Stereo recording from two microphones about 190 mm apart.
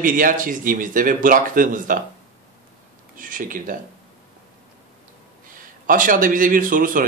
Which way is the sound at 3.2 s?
45° right (ahead or behind).